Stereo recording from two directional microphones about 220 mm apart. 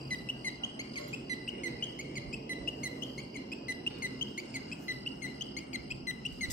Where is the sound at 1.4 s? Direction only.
35° left (ahead or behind).